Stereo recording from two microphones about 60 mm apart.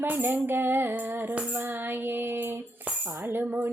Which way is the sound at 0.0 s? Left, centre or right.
Right.